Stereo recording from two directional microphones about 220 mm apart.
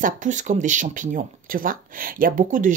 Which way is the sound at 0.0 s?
35° right (ahead or behind).